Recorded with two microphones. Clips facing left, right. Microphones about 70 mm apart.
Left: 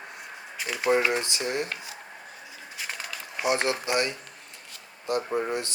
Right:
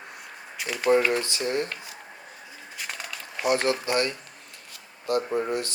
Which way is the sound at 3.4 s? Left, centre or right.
Left.